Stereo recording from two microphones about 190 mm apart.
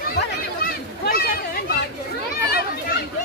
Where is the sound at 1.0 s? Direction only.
55° left (ahead or behind).